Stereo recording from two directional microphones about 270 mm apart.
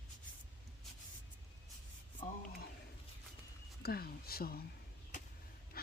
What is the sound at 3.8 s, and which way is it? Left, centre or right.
Speech, left.